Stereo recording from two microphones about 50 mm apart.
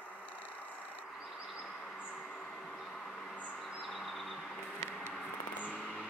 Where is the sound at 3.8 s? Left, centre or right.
Centre.